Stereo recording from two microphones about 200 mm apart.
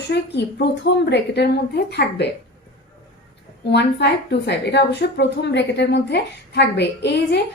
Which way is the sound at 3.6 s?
55° left (ahead or behind).